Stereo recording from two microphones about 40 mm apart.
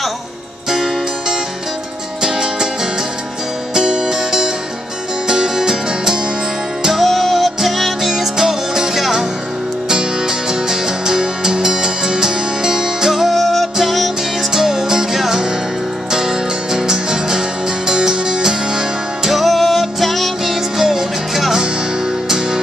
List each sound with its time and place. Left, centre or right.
2.2 s music: centre
13.1 s music: centre
14.5 s music: centre
19.3 s music: centre